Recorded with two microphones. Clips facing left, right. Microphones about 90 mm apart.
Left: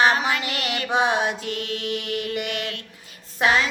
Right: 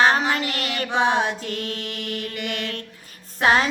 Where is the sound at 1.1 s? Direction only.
35° right (ahead or behind).